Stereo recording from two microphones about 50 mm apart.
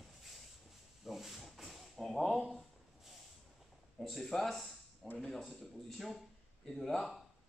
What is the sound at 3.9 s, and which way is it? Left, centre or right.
A man's voice, centre.